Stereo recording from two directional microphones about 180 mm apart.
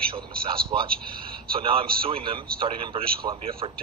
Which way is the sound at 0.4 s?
30° right (ahead or behind).